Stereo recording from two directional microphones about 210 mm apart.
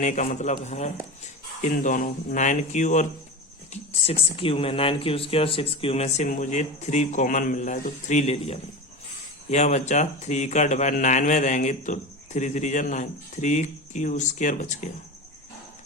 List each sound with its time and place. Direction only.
0.0 s speech: 35° left (ahead or behind)